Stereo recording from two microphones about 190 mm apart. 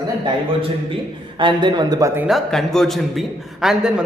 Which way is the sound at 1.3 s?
25° right (ahead or behind).